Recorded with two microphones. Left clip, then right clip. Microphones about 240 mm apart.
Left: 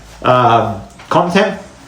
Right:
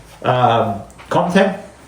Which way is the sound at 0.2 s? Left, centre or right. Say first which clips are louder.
Left 4 dB; left.